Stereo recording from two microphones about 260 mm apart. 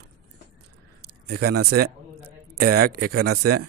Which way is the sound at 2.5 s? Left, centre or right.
Right.